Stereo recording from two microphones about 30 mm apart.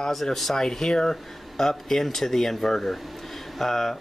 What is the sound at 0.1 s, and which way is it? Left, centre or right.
Speech, centre.